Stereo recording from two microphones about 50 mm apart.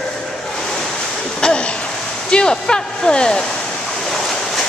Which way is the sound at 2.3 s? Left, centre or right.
Centre.